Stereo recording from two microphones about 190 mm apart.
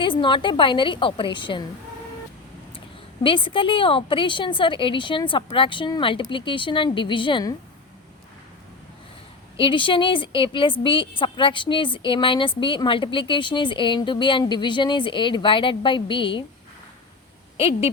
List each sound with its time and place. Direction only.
0.0 s a woman's voice: 25° left (ahead or behind)
3.2 s a woman's voice: 25° left (ahead or behind)
9.6 s a woman's voice: 25° left (ahead or behind)
17.6 s speech: 30° left (ahead or behind)